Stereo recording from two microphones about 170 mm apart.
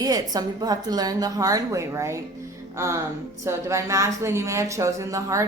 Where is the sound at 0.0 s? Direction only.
20° right (ahead or behind).